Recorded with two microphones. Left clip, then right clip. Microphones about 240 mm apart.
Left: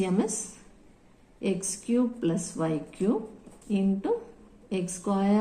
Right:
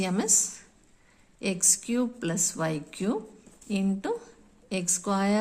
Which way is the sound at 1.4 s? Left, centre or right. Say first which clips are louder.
Right 3 dB; right.